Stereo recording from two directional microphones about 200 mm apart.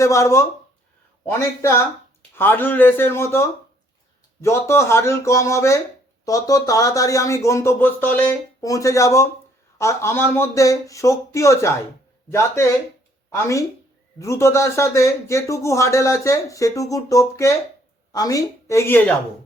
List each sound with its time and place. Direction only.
0.0 s speech: 15° left (ahead or behind)